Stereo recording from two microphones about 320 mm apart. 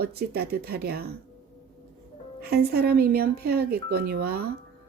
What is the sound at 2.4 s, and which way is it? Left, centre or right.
Speech, right.